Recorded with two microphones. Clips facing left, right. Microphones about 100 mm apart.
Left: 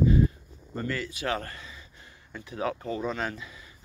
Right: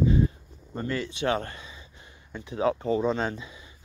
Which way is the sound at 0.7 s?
25° right (ahead or behind).